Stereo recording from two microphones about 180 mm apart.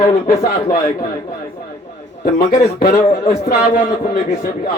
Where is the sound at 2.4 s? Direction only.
55° left (ahead or behind).